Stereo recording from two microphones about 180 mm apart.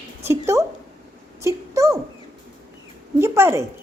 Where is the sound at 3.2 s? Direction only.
15° right (ahead or behind).